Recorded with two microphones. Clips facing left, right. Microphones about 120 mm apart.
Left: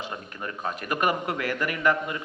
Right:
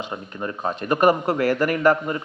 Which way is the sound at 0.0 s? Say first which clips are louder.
Right 5 dB; 25° right (ahead or behind).